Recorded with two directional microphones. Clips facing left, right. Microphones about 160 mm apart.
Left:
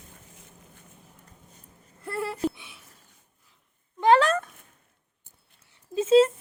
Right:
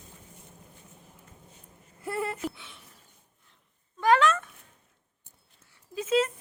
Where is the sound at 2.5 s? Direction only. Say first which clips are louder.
Even; 15° left (ahead or behind).